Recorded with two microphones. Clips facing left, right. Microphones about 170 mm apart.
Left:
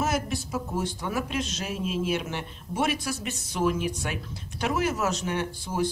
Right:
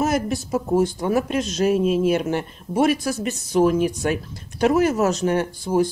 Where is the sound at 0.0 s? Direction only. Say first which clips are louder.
Right 6 dB; 45° right (ahead or behind).